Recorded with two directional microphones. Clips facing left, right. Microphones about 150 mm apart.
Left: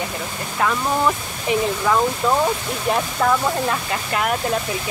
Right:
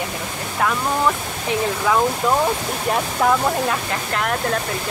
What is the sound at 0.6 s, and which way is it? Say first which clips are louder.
Speech: even; centre (ahead or behind).